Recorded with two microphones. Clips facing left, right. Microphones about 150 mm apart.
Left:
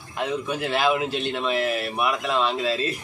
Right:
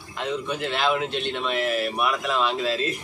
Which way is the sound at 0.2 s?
10° left (ahead or behind).